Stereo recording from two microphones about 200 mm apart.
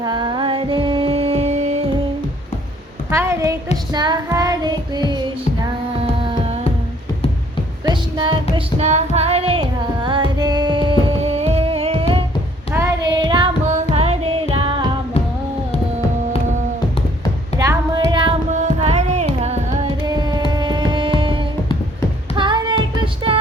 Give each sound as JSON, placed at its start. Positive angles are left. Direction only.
{"t": 0.0, "sound": "music", "side_deg": -20}
{"t": 3.1, "sound": "a sound", "side_deg": -15}
{"t": 3.9, "sound": "child singing", "side_deg": -20}
{"t": 6.0, "sound": "a sound", "side_deg": -30}
{"t": 7.9, "sound": "female singing", "side_deg": -25}
{"t": 12.7, "sound": "child singing", "side_deg": -10}
{"t": 13.1, "sound": "carnatic music", "side_deg": -20}
{"t": 13.9, "sound": "music", "side_deg": -30}
{"t": 17.6, "sound": "music", "side_deg": -15}
{"t": 18.5, "sound": "carnatic music", "side_deg": -35}
{"t": 20.5, "sound": "music", "side_deg": -20}
{"t": 22.4, "sound": "a sound", "side_deg": -25}
{"t": 23.0, "sound": "music", "side_deg": -25}